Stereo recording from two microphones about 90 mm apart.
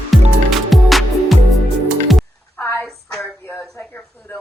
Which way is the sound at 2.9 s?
Centre (ahead or behind).